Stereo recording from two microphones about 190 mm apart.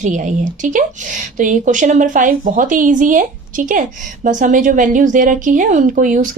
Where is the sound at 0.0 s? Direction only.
40° right (ahead or behind).